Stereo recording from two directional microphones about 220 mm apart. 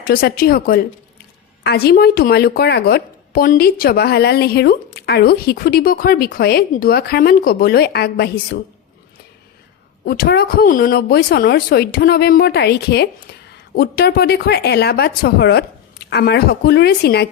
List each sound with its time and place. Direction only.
0.0 s speech: 45° left (ahead or behind)
10.1 s speech: 45° left (ahead or behind)